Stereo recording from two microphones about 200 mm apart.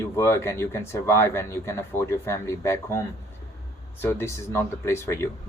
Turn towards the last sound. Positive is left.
turn(degrees=15)  # may be behind; listen again after turning